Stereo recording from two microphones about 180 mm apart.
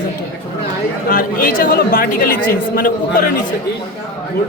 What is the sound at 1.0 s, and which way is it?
A woman's voice, 50° left (ahead or behind).